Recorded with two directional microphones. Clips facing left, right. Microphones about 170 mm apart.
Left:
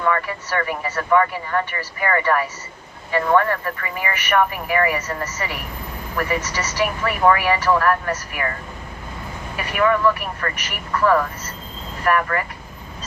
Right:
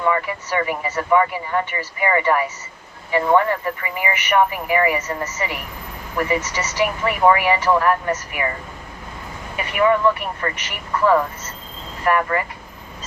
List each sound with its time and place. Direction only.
0.0 s speech: 15° right (ahead or behind)
9.6 s speech: 20° right (ahead or behind)